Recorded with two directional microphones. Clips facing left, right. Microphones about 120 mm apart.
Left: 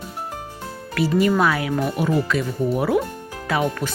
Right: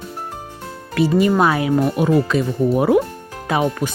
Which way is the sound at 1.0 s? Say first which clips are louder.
Right 3 dB; 20° right (ahead or behind).